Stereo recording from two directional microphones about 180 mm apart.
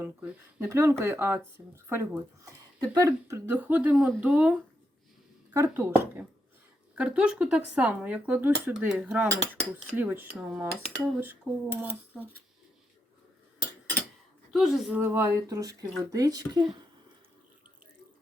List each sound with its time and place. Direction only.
0.0 s speech: 10° right (ahead or behind)
14.5 s speech: centre (ahead or behind); by 16.6 s 20° right (ahead or behind)